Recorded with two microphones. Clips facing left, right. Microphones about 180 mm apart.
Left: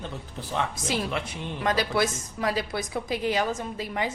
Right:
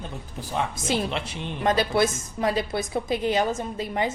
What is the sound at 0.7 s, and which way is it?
A woman's voice, 25° right (ahead or behind).